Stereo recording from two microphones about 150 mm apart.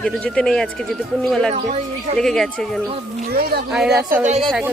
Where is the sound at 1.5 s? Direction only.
50° right (ahead or behind).